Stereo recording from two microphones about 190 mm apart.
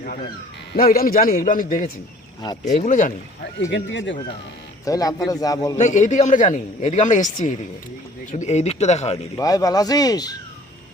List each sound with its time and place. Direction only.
0.9 s a man's voice: 50° left (ahead or behind)
2.4 s speech: 20° left (ahead or behind)
2.7 s speech: 40° left (ahead or behind)
3.7 s speech: 70° left (ahead or behind)
4.9 s speech: 20° left (ahead or behind)
5.7 s speech: 40° left (ahead or behind)
9.4 s speech: 20° left (ahead or behind)